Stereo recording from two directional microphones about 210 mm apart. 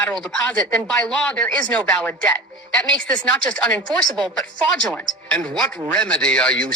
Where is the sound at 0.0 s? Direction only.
5° left (ahead or behind).